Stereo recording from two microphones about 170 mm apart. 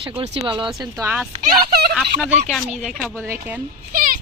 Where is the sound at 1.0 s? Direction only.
10° right (ahead or behind).